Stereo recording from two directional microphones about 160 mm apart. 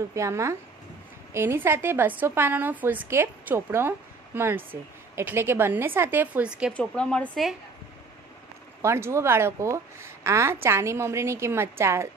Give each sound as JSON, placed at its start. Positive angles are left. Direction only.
{"t": 0.1, "sound": "a woman's voice", "side_deg": -20}
{"t": 6.7, "sound": "speech", "side_deg": 5}
{"t": 8.8, "sound": "a woman's voice", "side_deg": -15}